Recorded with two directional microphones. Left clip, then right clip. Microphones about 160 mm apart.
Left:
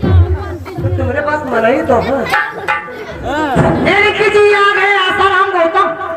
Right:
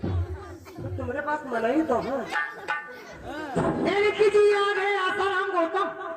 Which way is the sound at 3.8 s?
30° right (ahead or behind).